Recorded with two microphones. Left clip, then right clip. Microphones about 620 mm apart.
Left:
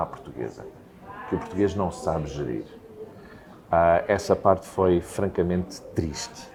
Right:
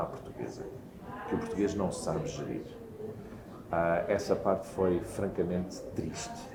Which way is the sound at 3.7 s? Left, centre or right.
Left.